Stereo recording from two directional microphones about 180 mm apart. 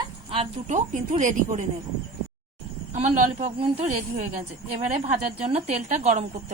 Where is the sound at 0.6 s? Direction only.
45° right (ahead or behind).